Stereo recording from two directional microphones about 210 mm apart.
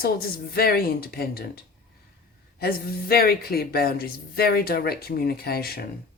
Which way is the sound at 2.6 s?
45° left (ahead or behind).